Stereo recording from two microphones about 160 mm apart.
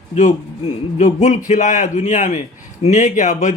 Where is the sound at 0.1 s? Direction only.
50° left (ahead or behind).